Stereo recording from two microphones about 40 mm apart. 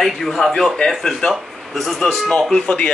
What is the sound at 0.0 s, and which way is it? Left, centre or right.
A man's voice, centre.